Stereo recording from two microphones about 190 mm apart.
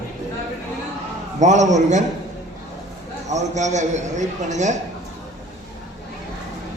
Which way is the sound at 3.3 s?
40° right (ahead or behind).